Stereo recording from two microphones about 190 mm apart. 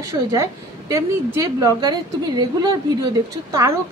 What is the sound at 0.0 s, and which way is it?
A woman's voice, 15° right (ahead or behind).